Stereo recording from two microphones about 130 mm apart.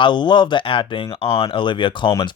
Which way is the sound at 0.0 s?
35° left (ahead or behind).